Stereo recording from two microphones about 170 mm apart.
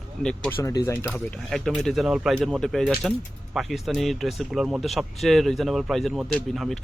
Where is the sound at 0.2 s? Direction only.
5° left (ahead or behind).